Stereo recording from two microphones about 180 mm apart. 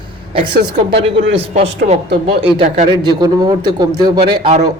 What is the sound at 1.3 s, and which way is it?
Speech, 35° right (ahead or behind).